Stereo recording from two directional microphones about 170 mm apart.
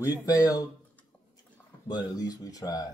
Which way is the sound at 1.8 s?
25° left (ahead or behind).